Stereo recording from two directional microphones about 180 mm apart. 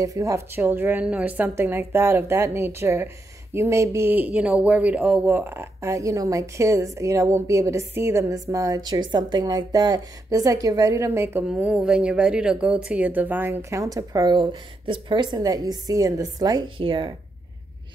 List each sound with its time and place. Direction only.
0.0 s speech: 20° right (ahead or behind)